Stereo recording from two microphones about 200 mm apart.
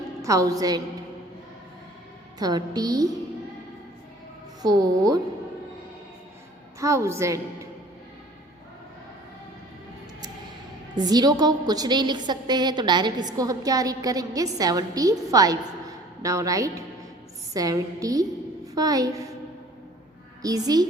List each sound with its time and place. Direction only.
0.2 s a woman's voice: 15° right (ahead or behind)
2.4 s a woman's voice: 20° right (ahead or behind)
4.6 s a woman's voice: 20° right (ahead or behind)
6.7 s a woman's voice: 15° right (ahead or behind)
10.9 s a woman's voice: 20° right (ahead or behind)
20.4 s a woman's voice: 20° right (ahead or behind)